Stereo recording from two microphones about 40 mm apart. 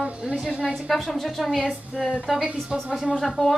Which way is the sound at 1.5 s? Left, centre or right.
Right.